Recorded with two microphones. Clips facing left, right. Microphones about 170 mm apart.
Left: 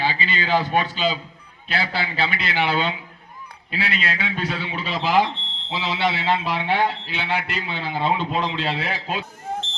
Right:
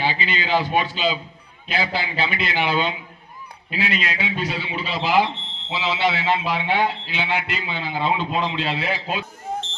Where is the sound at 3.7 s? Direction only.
15° right (ahead or behind).